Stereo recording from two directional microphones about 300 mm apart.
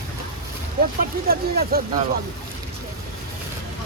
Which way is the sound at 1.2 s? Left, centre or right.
Right.